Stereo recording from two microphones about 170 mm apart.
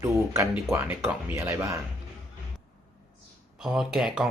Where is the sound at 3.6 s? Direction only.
5° right (ahead or behind).